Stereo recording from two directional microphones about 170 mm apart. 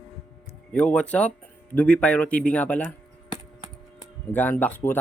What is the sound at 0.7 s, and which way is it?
Speech, 5° left (ahead or behind).